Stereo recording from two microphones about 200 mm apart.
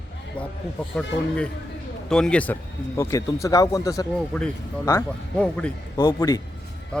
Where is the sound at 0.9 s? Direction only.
5° left (ahead or behind).